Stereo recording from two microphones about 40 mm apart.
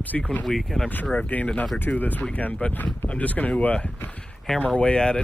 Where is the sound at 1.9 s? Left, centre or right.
Left.